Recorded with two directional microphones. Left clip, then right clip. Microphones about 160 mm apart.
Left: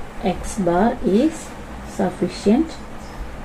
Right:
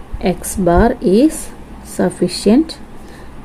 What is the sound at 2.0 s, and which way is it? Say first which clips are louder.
Speech: right 6 dB; 55° right (ahead or behind).